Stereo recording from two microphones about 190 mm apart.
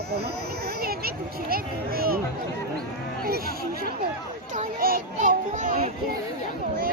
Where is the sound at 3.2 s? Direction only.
50° right (ahead or behind).